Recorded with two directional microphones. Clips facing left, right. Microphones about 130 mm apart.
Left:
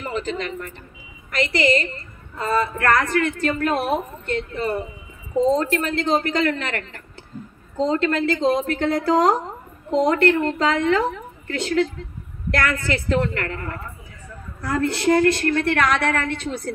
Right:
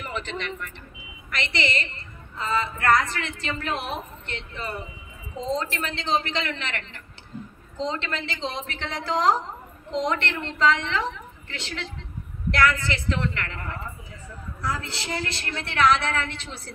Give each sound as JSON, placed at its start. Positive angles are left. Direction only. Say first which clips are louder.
{"t": 0.0, "sound": "a woman's voice", "louder": "left 6 dB", "side_deg": 40}